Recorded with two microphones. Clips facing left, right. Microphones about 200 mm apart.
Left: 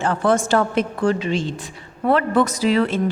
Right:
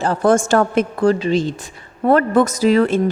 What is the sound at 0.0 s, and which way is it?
A woman's voice, 40° right (ahead or behind).